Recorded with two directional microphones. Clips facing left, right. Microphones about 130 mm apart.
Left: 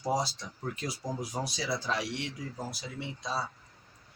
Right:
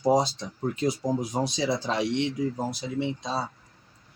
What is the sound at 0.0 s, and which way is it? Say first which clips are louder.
Speech: right 8 dB; 20° right (ahead or behind).